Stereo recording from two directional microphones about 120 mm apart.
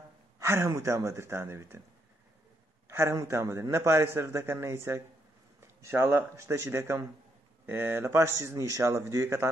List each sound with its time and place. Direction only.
0.4 s a man's voice: 20° right (ahead or behind)
2.9 s a man's voice: 20° right (ahead or behind)